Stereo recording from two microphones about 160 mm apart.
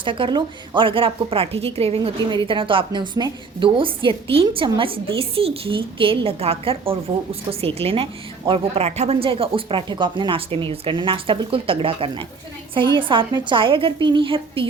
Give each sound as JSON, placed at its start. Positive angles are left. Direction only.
{"t": 0.0, "sound": "speech", "side_deg": -30}